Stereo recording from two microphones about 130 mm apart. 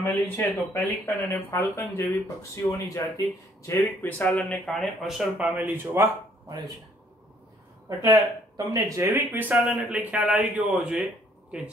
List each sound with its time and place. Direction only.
0.0 s speech: 15° left (ahead or behind)
4.2 s speech: 10° left (ahead or behind); by 6.0 s 15° right (ahead or behind)
8.0 s a man's voice: 25° right (ahead or behind); by 11.1 s 5° right (ahead or behind)